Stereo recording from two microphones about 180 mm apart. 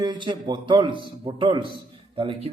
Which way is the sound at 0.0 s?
25° right (ahead or behind).